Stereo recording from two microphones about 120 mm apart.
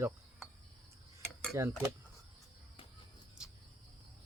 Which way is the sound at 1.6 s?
20° right (ahead or behind).